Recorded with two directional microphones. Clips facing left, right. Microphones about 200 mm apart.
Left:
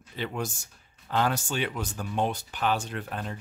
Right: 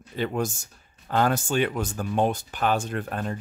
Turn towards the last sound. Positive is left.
turn(degrees=-50)  # may be behind; listen again after turning